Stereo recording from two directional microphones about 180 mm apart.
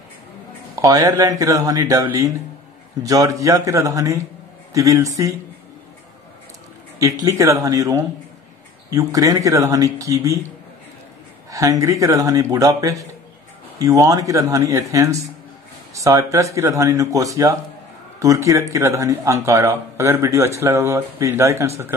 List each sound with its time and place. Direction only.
0.7 s speech: 20° right (ahead or behind)
7.0 s speech: 15° right (ahead or behind)
11.5 s speech: 20° right (ahead or behind)